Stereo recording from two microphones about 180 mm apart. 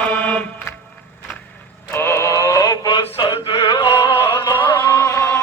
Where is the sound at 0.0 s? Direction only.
5° left (ahead or behind).